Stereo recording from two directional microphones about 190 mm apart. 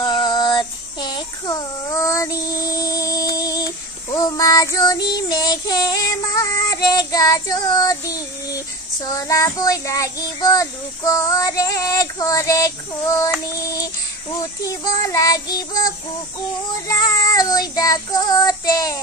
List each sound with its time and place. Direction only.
0.0 s child singing: 25° left (ahead or behind)